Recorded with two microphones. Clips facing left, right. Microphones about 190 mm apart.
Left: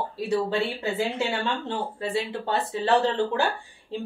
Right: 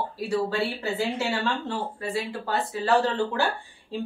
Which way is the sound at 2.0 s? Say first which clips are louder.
Left 2 dB; 25° left (ahead or behind).